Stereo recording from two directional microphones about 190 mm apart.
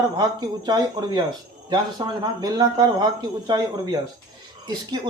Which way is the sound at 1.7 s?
20° right (ahead or behind).